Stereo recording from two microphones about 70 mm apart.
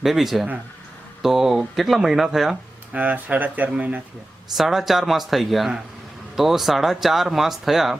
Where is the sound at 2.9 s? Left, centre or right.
Right.